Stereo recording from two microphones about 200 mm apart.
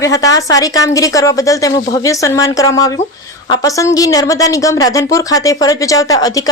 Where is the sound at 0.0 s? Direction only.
15° left (ahead or behind).